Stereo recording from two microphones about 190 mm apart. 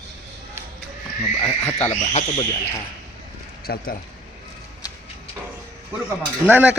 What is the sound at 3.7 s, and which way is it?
Speech, 55° left (ahead or behind).